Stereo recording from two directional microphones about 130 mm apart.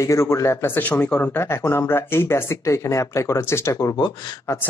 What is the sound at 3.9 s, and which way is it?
Speech, 35° left (ahead or behind).